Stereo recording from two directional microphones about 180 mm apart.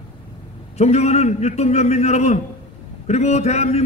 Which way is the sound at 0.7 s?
35° left (ahead or behind).